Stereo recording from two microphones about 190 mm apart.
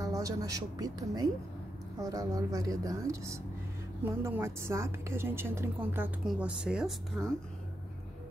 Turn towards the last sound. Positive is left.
turn(degrees=0)  # may be behind; listen again after turning